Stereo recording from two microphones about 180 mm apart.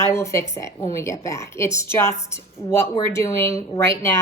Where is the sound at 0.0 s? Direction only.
15° left (ahead or behind).